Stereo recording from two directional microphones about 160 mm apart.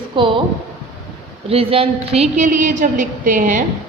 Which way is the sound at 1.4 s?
40° right (ahead or behind).